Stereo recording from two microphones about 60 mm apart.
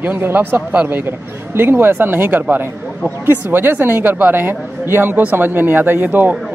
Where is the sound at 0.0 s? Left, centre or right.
Right.